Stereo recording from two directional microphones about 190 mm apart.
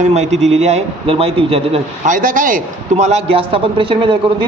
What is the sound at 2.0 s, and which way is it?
A man's voice, 45° right (ahead or behind).